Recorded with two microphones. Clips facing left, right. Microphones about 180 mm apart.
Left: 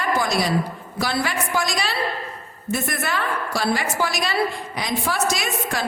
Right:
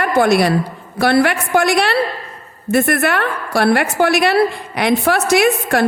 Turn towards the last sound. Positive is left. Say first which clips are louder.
# right 12 dB
turn(degrees=-65)  # may be behind; listen again after turning